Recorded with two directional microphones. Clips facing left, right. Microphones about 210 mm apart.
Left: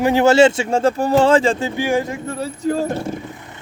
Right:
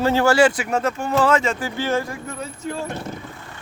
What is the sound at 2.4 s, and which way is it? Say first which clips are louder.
Speech: left 10 dB; 35° left (ahead or behind).